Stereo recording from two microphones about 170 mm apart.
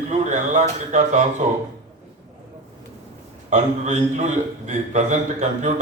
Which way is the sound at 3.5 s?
45° right (ahead or behind).